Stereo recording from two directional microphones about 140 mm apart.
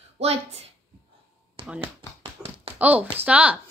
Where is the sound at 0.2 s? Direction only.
45° right (ahead or behind).